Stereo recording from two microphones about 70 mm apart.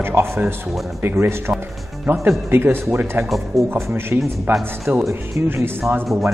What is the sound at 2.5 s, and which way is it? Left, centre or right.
Speech, right.